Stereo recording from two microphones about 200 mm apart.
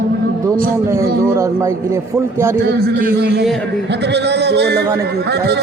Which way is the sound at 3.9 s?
60° right (ahead or behind).